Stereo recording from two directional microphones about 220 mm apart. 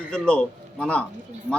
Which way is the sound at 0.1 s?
5° left (ahead or behind).